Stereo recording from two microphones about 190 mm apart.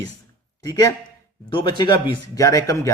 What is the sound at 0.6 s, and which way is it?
A man's voice, 20° left (ahead or behind).